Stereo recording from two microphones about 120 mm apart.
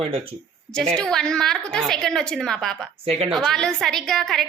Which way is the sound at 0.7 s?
5° left (ahead or behind).